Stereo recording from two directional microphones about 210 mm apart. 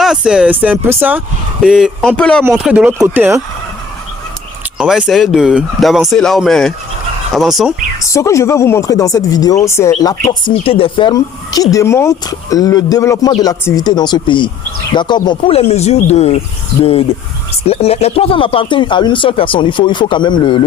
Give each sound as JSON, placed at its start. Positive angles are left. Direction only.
{"t": 0.0, "sound": "speech", "side_deg": -5}
{"t": 2.4, "sound": "speech", "side_deg": -10}
{"t": 4.8, "sound": "speech", "side_deg": -5}
{"t": 8.0, "sound": "speech", "side_deg": 15}